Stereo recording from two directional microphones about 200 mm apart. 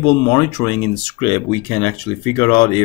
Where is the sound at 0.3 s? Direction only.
20° left (ahead or behind).